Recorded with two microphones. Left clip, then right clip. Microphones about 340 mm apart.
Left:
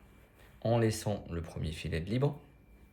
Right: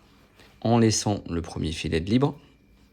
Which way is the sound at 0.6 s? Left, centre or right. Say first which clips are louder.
Right 8 dB; centre.